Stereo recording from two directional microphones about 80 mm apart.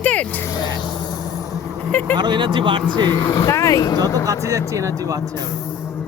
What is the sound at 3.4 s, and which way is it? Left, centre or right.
Speech, left.